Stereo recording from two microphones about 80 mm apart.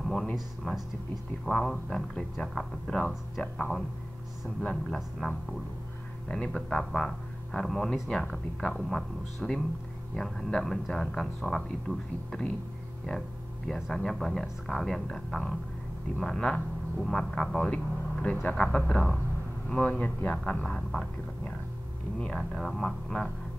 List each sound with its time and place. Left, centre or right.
0.0 s a man's voice: centre
13.7 s a man's voice: centre
17.6 s speech: centre
20.6 s a man's voice: centre
22.4 s a man's voice: centre